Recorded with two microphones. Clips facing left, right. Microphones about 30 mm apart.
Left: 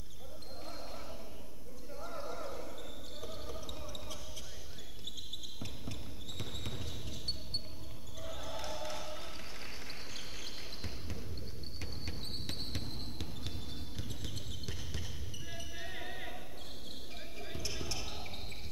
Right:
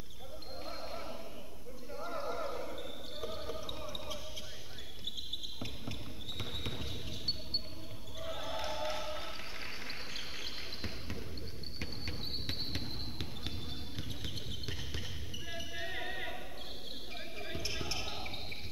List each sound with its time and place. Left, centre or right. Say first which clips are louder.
0.7 s basketball bounce: right 4 dB; centre
11.8 s a sound: right 3 dB; centre
17.4 s basketball bounce: right 2 dB; centre